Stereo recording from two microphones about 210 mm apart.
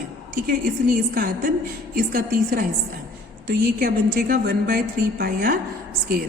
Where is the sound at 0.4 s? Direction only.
45° right (ahead or behind).